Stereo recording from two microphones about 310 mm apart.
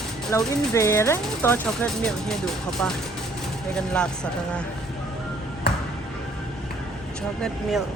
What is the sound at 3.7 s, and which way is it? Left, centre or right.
Speech, centre.